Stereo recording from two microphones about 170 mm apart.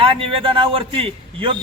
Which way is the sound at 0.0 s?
30° right (ahead or behind).